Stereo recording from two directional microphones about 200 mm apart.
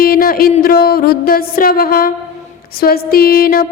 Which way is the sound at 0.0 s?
45° left (ahead or behind).